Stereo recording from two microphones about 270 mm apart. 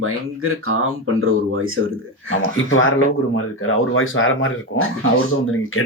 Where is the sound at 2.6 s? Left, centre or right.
Left.